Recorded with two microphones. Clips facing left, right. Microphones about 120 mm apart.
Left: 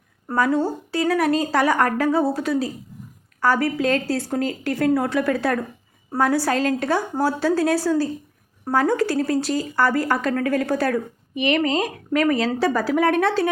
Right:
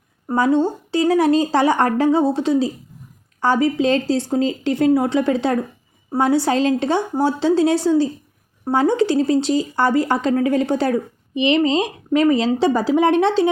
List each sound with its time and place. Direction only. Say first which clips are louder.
0.3 s speech: right 3 dB; 25° right (ahead or behind)